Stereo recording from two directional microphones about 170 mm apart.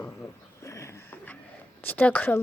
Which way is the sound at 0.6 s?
15° left (ahead or behind).